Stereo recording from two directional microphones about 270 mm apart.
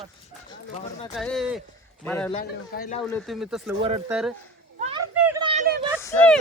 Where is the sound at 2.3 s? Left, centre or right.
Left.